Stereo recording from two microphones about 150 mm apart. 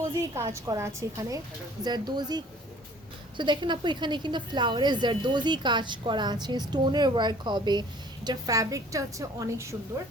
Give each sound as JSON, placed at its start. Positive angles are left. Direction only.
{"t": 0.5, "sound": "a woman's voice", "side_deg": -20}